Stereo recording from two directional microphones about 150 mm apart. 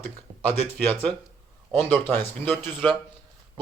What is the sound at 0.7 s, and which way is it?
Speech, 5° left (ahead or behind).